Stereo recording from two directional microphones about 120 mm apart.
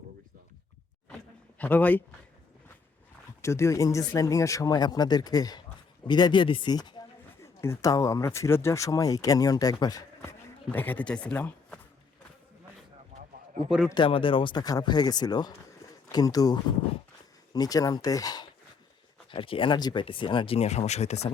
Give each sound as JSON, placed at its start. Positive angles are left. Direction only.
{"t": 1.5, "sound": "speech", "side_deg": 15}
{"t": 3.4, "sound": "speech", "side_deg": 25}
{"t": 7.4, "sound": "speech", "side_deg": 20}
{"t": 10.2, "sound": "speech", "side_deg": 15}
{"t": 13.7, "sound": "a man's voice", "side_deg": -5}
{"t": 13.9, "sound": "speech", "side_deg": 45}
{"t": 19.3, "sound": "speech", "side_deg": 45}